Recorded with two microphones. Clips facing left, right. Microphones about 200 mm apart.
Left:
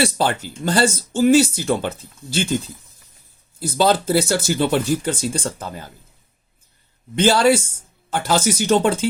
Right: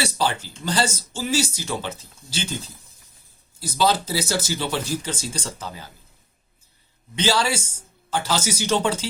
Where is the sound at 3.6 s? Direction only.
55° left (ahead or behind).